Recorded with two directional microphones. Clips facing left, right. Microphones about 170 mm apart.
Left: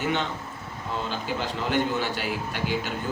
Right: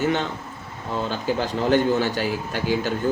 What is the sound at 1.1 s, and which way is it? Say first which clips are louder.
A man's voice: right 5 dB; 45° right (ahead or behind).